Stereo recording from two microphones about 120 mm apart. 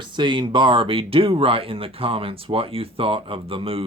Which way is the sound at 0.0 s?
40° right (ahead or behind).